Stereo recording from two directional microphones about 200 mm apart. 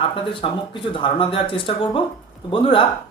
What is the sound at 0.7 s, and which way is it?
Speech, 25° left (ahead or behind).